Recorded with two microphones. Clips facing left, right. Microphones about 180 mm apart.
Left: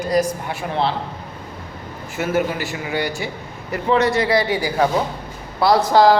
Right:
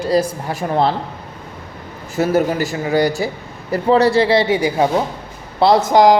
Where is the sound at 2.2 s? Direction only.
40° right (ahead or behind); by 6.2 s 15° right (ahead or behind).